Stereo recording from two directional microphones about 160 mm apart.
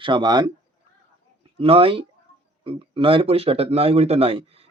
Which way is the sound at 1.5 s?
35° right (ahead or behind).